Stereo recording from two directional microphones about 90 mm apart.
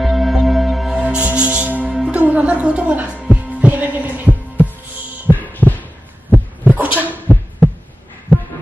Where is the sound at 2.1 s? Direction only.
15° right (ahead or behind).